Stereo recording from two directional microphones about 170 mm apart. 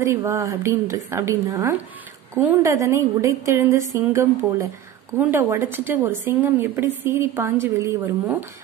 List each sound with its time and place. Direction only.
0.0 s a woman's voice: 15° right (ahead or behind)